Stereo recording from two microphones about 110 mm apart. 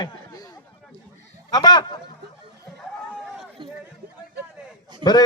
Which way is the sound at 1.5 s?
40° left (ahead or behind).